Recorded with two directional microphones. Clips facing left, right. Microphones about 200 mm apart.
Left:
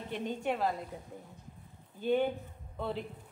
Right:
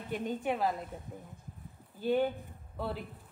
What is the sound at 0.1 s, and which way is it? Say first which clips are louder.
Speech: right 1 dB; 5° right (ahead or behind).